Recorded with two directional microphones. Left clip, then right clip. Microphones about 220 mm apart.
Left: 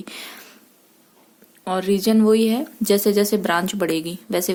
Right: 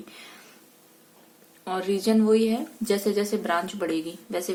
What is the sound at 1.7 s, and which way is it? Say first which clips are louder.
Speech: left 5 dB; 45° left (ahead or behind).